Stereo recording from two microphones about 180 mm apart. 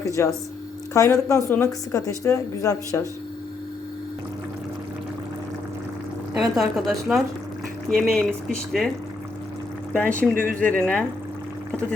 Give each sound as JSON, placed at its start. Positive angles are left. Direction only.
{"t": 0.0, "sound": "a woman's voice", "side_deg": 15}
{"t": 6.3, "sound": "a woman's voice", "side_deg": 0}
{"t": 10.0, "sound": "a woman's voice", "side_deg": 5}
{"t": 10.3, "sound": "speech", "side_deg": -50}
{"t": 10.6, "sound": "a woman's voice", "side_deg": 5}